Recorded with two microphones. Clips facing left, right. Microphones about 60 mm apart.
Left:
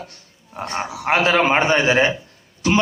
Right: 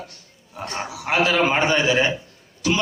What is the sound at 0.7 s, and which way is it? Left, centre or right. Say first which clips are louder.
A man's voice: left 3 dB; left.